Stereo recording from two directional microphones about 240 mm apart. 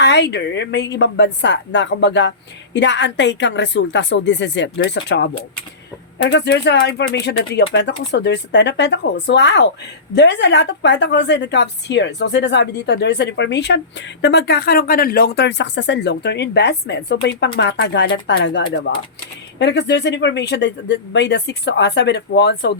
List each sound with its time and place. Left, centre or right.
0.0 s a woman's voice: left